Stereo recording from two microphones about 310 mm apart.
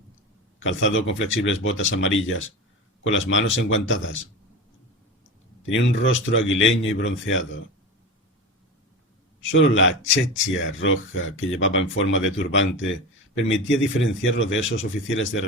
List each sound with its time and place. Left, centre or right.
0.6 s speech: left
5.6 s speech: left
9.4 s speech: left